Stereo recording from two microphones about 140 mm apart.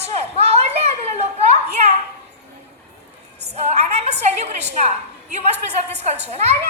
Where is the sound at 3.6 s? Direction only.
50° right (ahead or behind).